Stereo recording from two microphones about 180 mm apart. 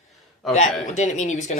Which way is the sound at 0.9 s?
40° left (ahead or behind).